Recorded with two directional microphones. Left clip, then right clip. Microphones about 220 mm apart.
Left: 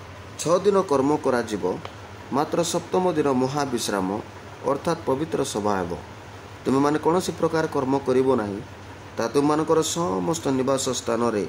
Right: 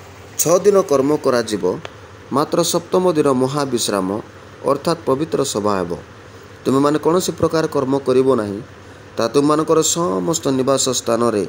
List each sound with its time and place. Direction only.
0.4 s a man's voice: 15° right (ahead or behind)